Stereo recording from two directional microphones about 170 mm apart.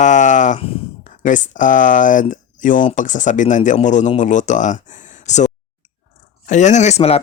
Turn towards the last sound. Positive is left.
turn(degrees=40)  # may be behind; listen again after turning